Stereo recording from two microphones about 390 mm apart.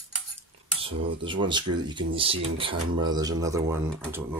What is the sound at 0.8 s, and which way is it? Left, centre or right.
Speech, centre.